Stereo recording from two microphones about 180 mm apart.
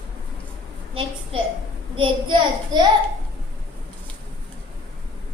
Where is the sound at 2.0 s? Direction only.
25° right (ahead or behind).